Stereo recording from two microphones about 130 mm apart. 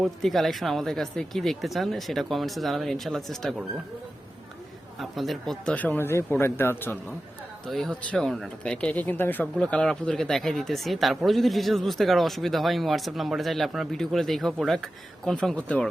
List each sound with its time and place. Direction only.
0.0 s speech: centre (ahead or behind)
4.9 s speech: centre (ahead or behind)
5.7 s speech: 10° left (ahead or behind)
7.7 s speech: 5° left (ahead or behind)